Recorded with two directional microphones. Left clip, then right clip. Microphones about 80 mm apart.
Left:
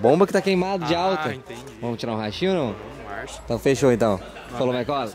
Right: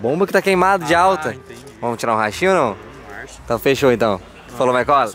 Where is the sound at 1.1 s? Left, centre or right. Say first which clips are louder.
Right 4 dB; centre.